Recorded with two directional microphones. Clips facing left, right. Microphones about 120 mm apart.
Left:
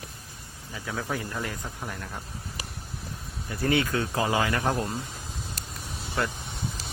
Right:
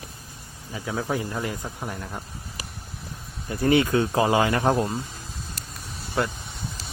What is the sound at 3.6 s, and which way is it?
Speech, 20° right (ahead or behind).